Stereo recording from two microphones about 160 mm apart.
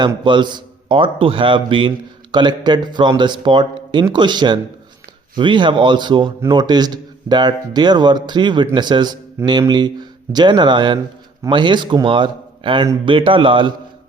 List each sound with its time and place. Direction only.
0.3 s a man's voice: 30° right (ahead or behind)